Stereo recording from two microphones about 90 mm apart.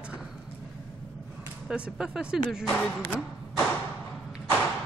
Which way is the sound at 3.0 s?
20° left (ahead or behind).